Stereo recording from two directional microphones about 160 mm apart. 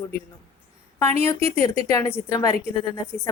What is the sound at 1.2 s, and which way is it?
A woman's voice, 15° left (ahead or behind).